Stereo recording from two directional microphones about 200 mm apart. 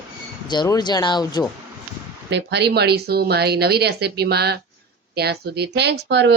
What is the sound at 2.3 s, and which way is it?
A woman's voice, 55° right (ahead or behind).